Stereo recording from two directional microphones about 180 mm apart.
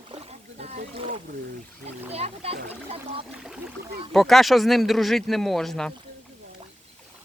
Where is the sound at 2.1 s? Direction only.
35° right (ahead or behind).